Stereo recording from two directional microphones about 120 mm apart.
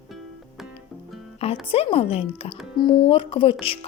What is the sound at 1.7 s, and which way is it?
Speech, 55° left (ahead or behind).